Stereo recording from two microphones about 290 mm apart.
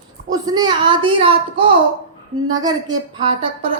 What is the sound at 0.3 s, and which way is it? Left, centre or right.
A woman's voice, centre.